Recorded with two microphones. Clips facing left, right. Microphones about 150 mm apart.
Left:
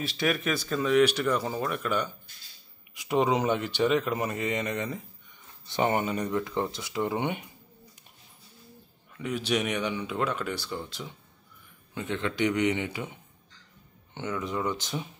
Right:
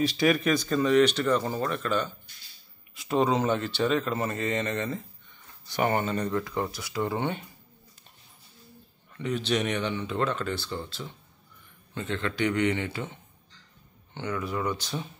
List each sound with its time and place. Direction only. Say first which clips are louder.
0.0 s speech: right 5 dB; centre (ahead or behind); by 7.4 s 15° left (ahead or behind)
9.1 s speech: right 1 dB; 10° left (ahead or behind)